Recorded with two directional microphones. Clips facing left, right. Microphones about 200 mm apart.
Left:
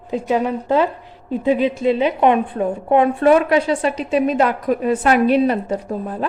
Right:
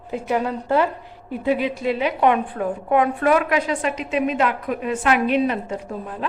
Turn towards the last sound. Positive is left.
turn(degrees=40)  # may be behind; listen again after turning